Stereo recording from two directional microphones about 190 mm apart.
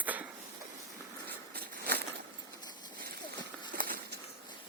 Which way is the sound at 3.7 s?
50° right (ahead or behind).